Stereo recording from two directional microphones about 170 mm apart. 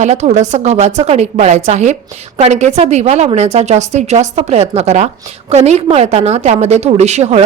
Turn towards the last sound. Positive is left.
turn(degrees=-40)  # may be behind; listen again after turning